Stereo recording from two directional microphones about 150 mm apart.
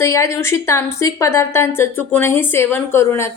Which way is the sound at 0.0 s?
20° left (ahead or behind).